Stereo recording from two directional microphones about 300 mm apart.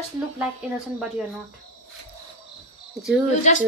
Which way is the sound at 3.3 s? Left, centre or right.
Left.